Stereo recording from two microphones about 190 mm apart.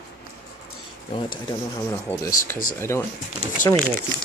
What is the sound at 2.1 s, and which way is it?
Speech, 10° left (ahead or behind).